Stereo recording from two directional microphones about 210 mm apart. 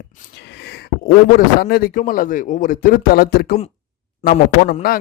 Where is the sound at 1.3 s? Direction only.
45° left (ahead or behind).